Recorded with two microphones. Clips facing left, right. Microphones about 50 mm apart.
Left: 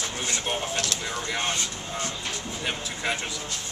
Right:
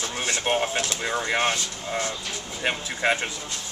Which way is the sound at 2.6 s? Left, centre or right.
Right.